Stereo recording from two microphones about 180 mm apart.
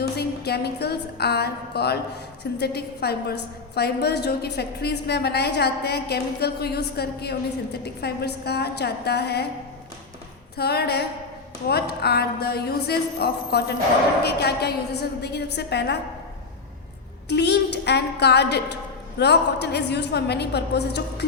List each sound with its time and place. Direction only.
0.0 s a sound: 65° left (ahead or behind)
2.4 s a woman's voice: 65° left (ahead or behind)
10.6 s a woman's voice: 65° left (ahead or behind)
17.2 s a woman's voice: 70° left (ahead or behind)